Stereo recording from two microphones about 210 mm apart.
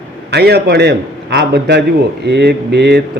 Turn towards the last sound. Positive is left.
turn(degrees=-55)  # may be behind; listen again after turning